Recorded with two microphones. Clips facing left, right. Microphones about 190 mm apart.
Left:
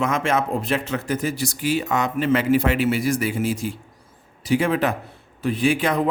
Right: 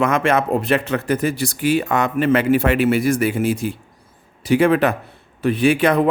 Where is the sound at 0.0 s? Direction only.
65° right (ahead or behind).